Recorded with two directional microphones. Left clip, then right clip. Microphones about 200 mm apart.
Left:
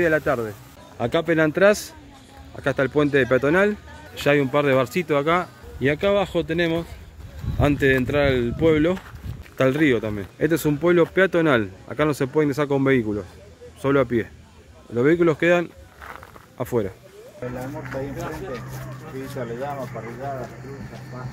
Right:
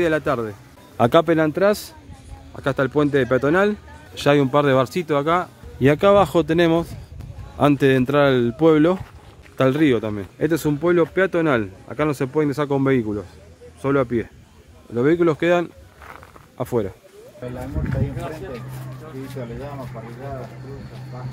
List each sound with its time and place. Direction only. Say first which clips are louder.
0.0 s speech: even; 20° right (ahead or behind)
0.9 s speech: right 7 dB; 40° right (ahead or behind)
1.2 s speech: even; 15° right (ahead or behind)
5.8 s speech: right 6 dB; 30° right (ahead or behind); by 16.9 s 10° right (ahead or behind)